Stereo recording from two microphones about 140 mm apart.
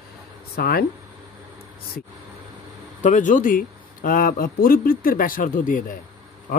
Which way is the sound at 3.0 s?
60° left (ahead or behind).